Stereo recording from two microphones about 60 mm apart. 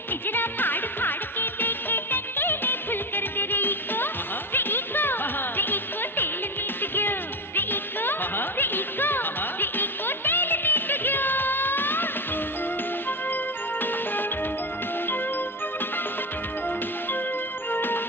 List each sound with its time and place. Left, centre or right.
0.3 s music: left
17.7 s music: left